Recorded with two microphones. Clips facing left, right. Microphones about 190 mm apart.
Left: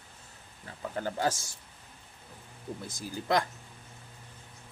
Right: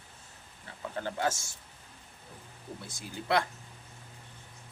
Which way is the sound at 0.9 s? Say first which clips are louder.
Left 1 dB; 35° left (ahead or behind).